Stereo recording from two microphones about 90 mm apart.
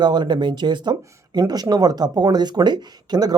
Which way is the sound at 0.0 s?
55° right (ahead or behind).